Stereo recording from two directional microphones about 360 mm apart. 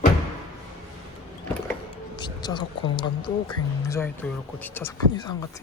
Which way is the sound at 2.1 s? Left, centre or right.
Centre.